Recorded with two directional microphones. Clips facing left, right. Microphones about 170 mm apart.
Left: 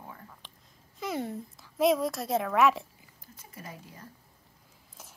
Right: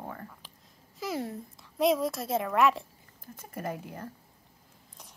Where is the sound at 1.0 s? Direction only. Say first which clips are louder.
Even; centre (ahead or behind).